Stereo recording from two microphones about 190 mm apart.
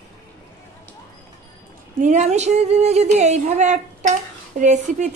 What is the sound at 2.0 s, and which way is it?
A woman's voice, 40° right (ahead or behind).